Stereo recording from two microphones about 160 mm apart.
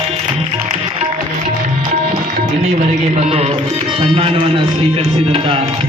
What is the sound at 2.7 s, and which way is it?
Speech, 40° right (ahead or behind).